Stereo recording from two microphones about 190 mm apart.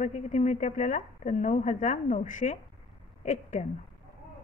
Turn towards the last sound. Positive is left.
turn(degrees=40)  # may be behind; listen again after turning